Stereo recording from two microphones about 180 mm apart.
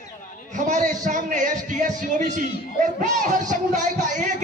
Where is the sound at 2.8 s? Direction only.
45° right (ahead or behind).